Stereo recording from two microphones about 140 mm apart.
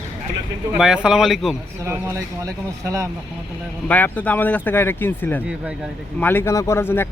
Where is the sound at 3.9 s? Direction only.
10° left (ahead or behind).